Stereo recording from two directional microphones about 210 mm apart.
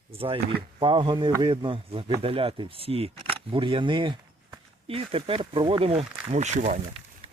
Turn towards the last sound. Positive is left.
turn(degrees=-30)  # may be behind; listen again after turning